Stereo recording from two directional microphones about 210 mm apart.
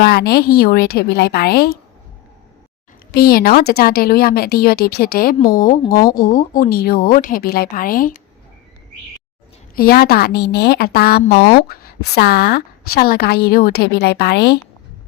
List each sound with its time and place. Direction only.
0.0 s a woman's voice: 50° left (ahead or behind)
3.2 s a woman's voice: 45° left (ahead or behind)
9.7 s a woman's voice: 45° left (ahead or behind)